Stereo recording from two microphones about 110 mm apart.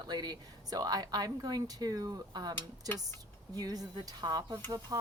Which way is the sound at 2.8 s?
25° left (ahead or behind).